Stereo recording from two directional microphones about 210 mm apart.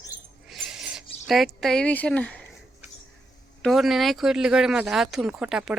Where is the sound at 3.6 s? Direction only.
Centre (ahead or behind).